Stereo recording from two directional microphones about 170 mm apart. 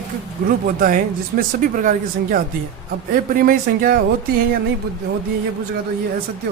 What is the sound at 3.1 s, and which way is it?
Speech, 60° right (ahead or behind).